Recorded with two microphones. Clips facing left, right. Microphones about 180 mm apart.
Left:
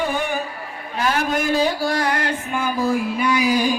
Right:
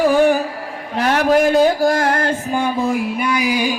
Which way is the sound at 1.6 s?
45° right (ahead or behind).